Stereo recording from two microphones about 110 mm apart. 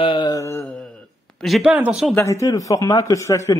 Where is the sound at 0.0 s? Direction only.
45° left (ahead or behind).